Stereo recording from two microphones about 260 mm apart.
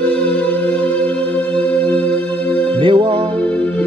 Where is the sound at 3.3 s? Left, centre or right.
Centre.